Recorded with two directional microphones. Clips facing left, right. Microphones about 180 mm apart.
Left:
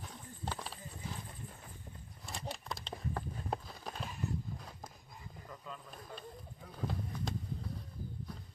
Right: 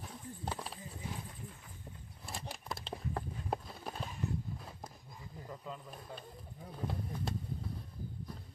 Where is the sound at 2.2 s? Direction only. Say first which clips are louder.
Left 1 dB; 5° right (ahead or behind).